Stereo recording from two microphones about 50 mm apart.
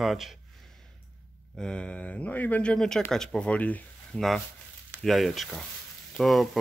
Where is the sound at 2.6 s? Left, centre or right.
Centre.